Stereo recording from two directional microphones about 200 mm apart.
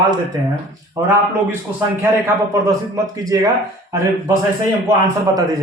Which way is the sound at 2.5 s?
15° right (ahead or behind).